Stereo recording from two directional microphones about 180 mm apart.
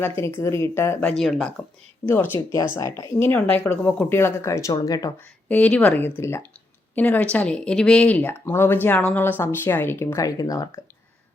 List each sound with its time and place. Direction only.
0.0 s speech: 15° left (ahead or behind)
1.1 s speech: centre (ahead or behind)
2.0 s speech: 10° left (ahead or behind)
5.5 s speech: 10° left (ahead or behind)